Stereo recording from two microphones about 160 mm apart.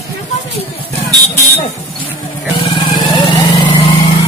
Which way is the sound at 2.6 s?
30° left (ahead or behind).